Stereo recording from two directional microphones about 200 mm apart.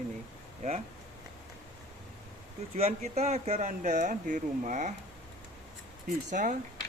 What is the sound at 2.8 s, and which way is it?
Speech, 35° right (ahead or behind).